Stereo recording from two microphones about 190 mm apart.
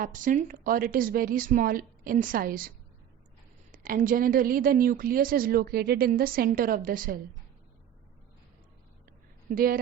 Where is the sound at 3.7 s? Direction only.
45° right (ahead or behind).